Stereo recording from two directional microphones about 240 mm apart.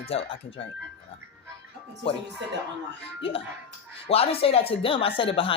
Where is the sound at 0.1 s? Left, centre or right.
Left.